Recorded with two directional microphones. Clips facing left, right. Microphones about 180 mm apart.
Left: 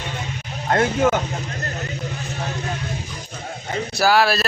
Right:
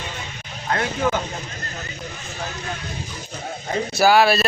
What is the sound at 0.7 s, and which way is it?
Speech, 45° left (ahead or behind).